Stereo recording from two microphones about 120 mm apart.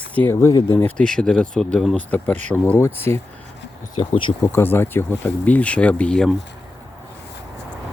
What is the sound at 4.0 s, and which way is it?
Speech, 45° left (ahead or behind).